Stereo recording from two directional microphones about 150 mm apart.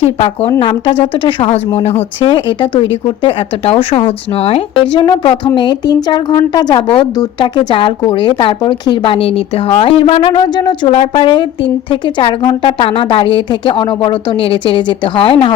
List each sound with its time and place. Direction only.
0.0 s a woman's voice: 40° left (ahead or behind)